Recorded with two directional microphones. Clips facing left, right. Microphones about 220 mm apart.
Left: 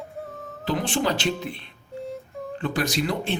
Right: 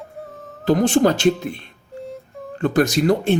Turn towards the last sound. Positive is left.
turn(degrees=-45)  # may be behind; listen again after turning